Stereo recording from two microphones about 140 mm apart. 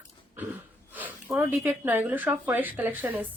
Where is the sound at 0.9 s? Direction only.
10° right (ahead or behind).